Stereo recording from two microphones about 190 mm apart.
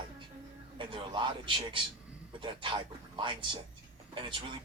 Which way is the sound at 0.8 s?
25° right (ahead or behind).